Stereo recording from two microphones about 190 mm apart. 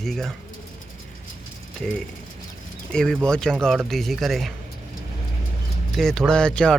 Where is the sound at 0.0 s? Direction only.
Centre (ahead or behind).